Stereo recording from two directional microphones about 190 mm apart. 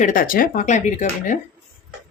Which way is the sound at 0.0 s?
45° left (ahead or behind).